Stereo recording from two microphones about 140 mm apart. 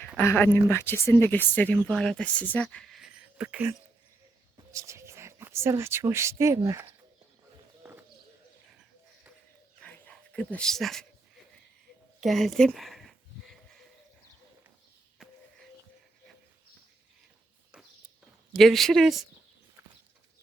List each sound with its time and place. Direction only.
0.2 s speech: 20° left (ahead or behind); by 3.8 s 10° right (ahead or behind)
4.5 s speech: 20° right (ahead or behind)
9.8 s dog: 10° left (ahead or behind)
12.2 s a sound: centre (ahead or behind)
15.2 s a sound: centre (ahead or behind)
18.5 s speech: centre (ahead or behind)